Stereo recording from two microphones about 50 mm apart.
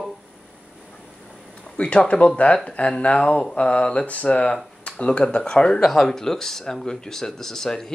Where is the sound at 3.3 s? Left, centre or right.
Centre.